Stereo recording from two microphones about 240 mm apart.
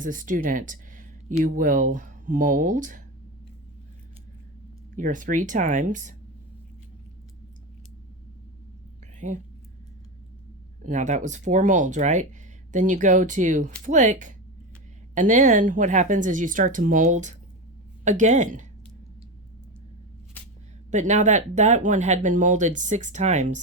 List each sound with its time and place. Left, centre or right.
0.0 s speech: right
4.9 s speech: right
9.1 s speech: right
10.8 s speech: right
20.4 s a sound: centre
20.9 s speech: right